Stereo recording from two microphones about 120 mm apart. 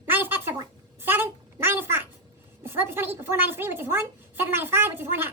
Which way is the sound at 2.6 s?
20° right (ahead or behind).